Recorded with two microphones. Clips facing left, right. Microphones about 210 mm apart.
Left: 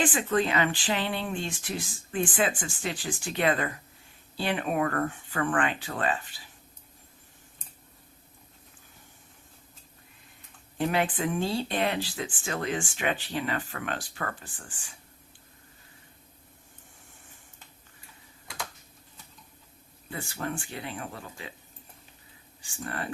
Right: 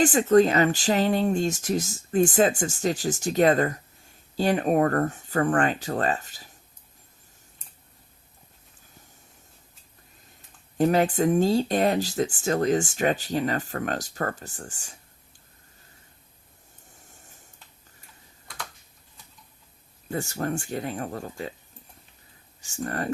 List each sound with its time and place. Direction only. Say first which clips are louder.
0.0 s speech: right 8 dB; 40° right (ahead or behind)
10.8 s speech: right 7 dB; 40° right (ahead or behind)
20.1 s speech: right 6 dB; 45° right (ahead or behind)
22.6 s speech: right 6 dB; 45° right (ahead or behind)